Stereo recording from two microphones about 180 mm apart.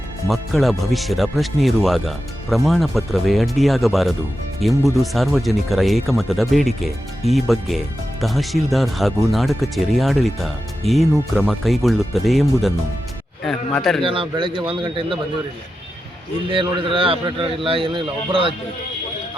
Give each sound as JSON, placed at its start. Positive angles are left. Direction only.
{"t": 0.3, "sound": "speech", "side_deg": 0}
{"t": 13.4, "sound": "a sound", "side_deg": 0}
{"t": 14.0, "sound": "a man's voice", "side_deg": -30}
{"t": 16.5, "sound": "a man's voice", "side_deg": -30}